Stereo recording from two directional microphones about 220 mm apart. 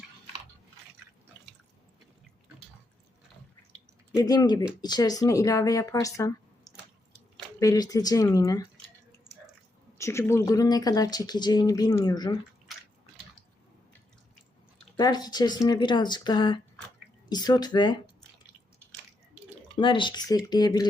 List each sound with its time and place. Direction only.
4.2 s speech: 20° left (ahead or behind)
10.0 s speech: 10° left (ahead or behind)
14.9 s speech: 20° left (ahead or behind)
19.7 s speech: 20° left (ahead or behind)